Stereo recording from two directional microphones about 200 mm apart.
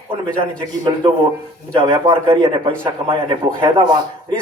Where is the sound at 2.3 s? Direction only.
25° right (ahead or behind).